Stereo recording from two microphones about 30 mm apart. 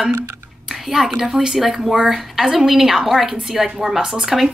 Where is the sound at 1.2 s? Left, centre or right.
Right.